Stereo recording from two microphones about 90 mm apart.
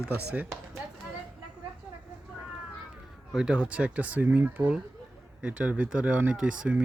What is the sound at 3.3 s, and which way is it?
Speech, 10° right (ahead or behind).